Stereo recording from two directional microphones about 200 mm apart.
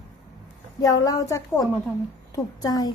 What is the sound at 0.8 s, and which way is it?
A woman's voice, 15° left (ahead or behind).